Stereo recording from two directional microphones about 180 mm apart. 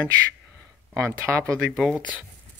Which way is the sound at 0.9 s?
15° right (ahead or behind).